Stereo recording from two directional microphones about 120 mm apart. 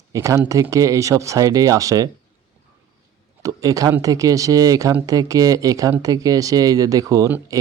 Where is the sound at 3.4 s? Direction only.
30° right (ahead or behind).